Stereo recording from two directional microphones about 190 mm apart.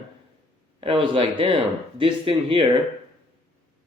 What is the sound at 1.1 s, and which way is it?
Speech, 30° right (ahead or behind).